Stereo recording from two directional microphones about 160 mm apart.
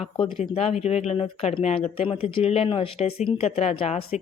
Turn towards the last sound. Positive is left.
turn(degrees=40)  # may be behind; listen again after turning